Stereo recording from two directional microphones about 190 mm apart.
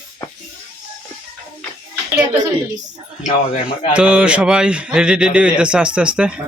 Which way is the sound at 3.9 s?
5° right (ahead or behind).